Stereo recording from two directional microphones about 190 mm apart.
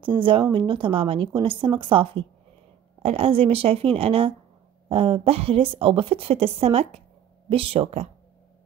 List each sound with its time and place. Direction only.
0.0 s a woman's voice: 25° right (ahead or behind)